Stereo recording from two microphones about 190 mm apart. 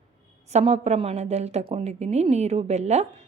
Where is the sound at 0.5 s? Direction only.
35° right (ahead or behind).